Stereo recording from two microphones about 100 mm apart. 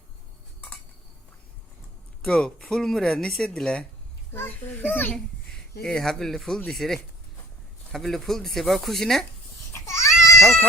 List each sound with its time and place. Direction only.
2.2 s speech: 10° left (ahead or behind)
5.8 s speech: 5° left (ahead or behind)
9.7 s babbling: 30° left (ahead or behind)
10.4 s speech: centre (ahead or behind)